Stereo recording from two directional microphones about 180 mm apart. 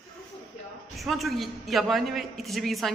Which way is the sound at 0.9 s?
Centre (ahead or behind).